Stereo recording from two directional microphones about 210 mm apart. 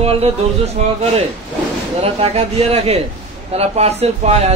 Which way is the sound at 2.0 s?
30° right (ahead or behind).